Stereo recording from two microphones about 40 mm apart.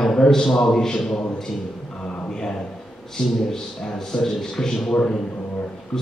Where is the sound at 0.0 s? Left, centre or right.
Centre.